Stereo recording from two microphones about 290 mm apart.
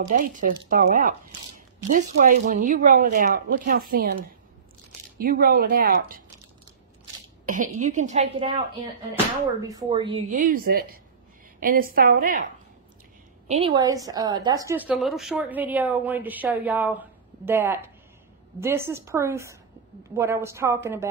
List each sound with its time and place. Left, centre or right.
0.0 s speech: right
5.2 s speech: right
7.4 s speech: right
13.5 s a woman's voice: centre